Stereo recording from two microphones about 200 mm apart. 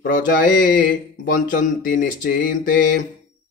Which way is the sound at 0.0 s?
40° left (ahead or behind).